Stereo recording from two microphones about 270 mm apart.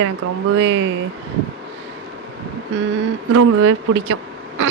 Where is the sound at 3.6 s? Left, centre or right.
Right.